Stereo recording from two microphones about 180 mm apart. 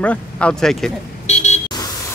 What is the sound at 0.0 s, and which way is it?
Speech, 5° left (ahead or behind).